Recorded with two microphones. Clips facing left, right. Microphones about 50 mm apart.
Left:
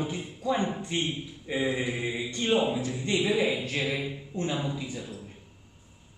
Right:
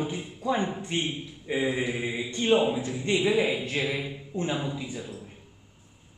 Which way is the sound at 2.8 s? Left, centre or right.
Right.